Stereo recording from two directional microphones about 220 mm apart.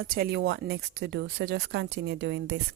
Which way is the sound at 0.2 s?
50° right (ahead or behind).